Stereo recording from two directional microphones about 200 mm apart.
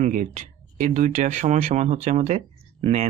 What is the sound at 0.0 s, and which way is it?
Speech, 40° right (ahead or behind).